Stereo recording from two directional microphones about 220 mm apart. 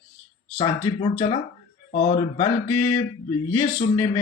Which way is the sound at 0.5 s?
20° left (ahead or behind).